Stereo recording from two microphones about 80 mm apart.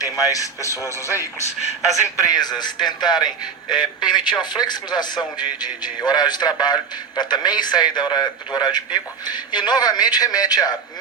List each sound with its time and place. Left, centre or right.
0.0 s speech: left
1.9 s a man's voice: left